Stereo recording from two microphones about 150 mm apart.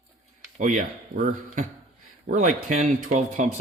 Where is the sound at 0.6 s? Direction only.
60° right (ahead or behind).